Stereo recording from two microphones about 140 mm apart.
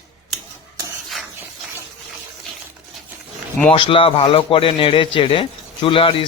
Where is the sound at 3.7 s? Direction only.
40° left (ahead or behind).